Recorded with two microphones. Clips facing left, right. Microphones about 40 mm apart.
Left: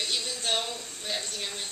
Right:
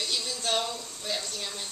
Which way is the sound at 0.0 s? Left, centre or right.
Left.